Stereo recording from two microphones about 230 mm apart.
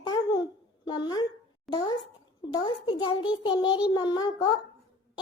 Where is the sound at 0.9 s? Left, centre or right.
Centre.